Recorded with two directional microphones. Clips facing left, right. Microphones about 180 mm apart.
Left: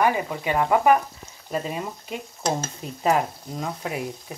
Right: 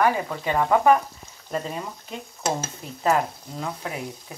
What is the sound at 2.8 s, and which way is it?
Stir, 20° left (ahead or behind).